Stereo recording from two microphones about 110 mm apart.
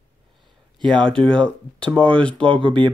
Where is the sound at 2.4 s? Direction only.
50° right (ahead or behind).